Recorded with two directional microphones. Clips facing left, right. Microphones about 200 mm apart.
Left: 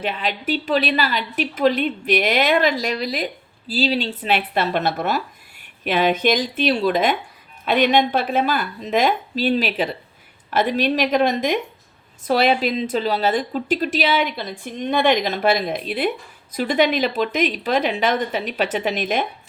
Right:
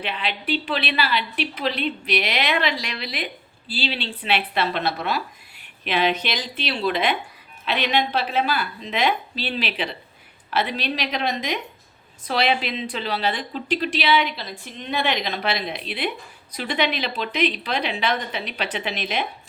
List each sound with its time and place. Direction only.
0.0 s a woman's voice: 45° left (ahead or behind)